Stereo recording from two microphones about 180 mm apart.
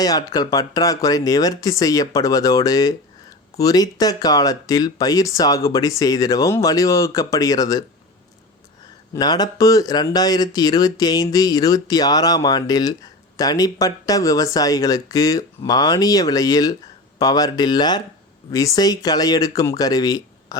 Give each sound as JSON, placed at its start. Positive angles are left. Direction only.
{"t": 0.0, "sound": "speech", "side_deg": 20}
{"t": 9.1, "sound": "speech", "side_deg": 20}